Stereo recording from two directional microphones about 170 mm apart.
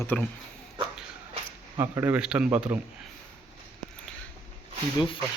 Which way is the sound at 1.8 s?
15° right (ahead or behind).